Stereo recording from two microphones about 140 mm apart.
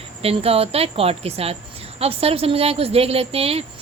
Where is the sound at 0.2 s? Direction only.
45° right (ahead or behind).